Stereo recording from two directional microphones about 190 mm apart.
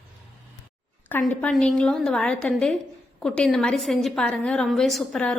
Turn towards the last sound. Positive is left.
turn(degrees=5)  # may be behind; listen again after turning